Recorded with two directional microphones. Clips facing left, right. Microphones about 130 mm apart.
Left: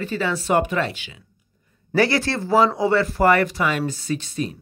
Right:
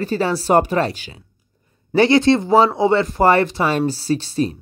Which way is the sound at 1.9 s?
20° right (ahead or behind).